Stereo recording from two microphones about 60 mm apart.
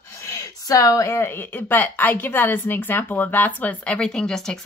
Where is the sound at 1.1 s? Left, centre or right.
Left.